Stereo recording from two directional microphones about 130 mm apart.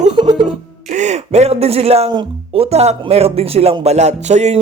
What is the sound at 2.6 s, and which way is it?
Speech, 55° right (ahead or behind).